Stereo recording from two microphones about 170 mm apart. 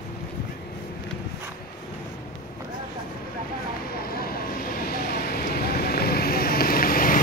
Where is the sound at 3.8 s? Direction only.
60° left (ahead or behind).